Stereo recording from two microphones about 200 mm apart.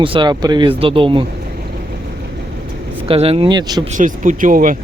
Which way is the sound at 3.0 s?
30° right (ahead or behind).